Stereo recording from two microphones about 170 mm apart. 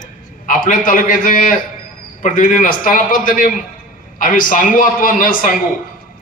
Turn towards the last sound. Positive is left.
turn(degrees=55)  # may be behind; listen again after turning